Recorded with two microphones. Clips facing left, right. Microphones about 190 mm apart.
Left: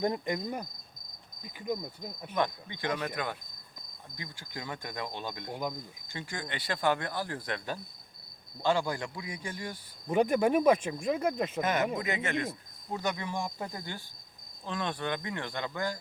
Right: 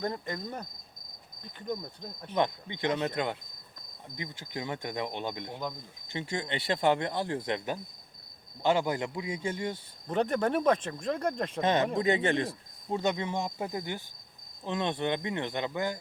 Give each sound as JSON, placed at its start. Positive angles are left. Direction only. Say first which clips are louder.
{"t": 0.0, "sound": "speech", "louder": "left 3 dB", "side_deg": 15}
{"t": 2.3, "sound": "speech", "louder": "right 2 dB", "side_deg": -25}
{"t": 4.2, "sound": "speech", "louder": "right 5 dB", "side_deg": -20}
{"t": 10.1, "sound": "speech", "louder": "left 2 dB", "side_deg": 10}
{"t": 11.6, "sound": "speech", "louder": "right 6 dB", "side_deg": -30}